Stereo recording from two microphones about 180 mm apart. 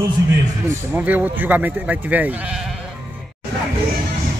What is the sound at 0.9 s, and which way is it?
Speech, 10° right (ahead or behind).